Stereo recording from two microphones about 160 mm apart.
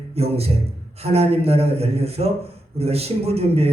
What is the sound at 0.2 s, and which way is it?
Speech, 40° right (ahead or behind).